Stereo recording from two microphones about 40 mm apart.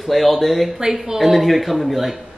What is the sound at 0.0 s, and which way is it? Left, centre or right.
Speech, centre.